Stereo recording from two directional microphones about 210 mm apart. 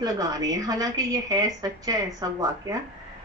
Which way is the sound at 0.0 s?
15° right (ahead or behind).